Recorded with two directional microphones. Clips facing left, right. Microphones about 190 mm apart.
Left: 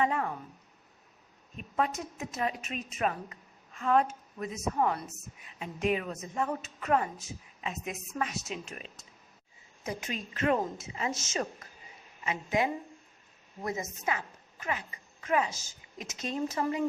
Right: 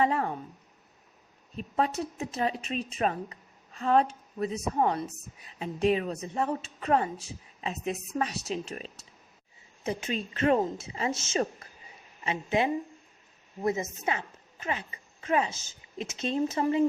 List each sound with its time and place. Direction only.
0.0 s a woman's voice: 35° right (ahead or behind)
1.5 s a woman's voice: 30° right (ahead or behind)